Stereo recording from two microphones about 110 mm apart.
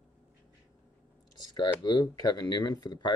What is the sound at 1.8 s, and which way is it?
Speech, 35° left (ahead or behind).